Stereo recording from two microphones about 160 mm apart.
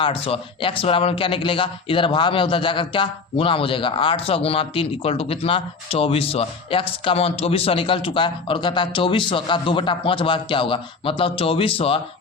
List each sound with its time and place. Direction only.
0.0 s speech: 35° left (ahead or behind)